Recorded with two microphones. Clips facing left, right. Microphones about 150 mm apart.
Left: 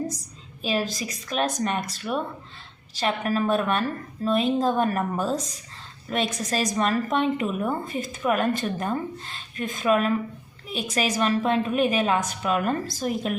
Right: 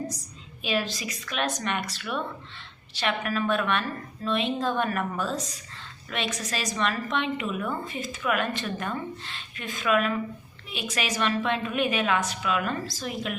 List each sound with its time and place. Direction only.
0.6 s a woman's voice: 40° left (ahead or behind)